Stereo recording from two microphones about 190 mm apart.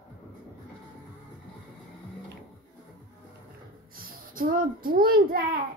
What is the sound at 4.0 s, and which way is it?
A child's voice, 50° right (ahead or behind).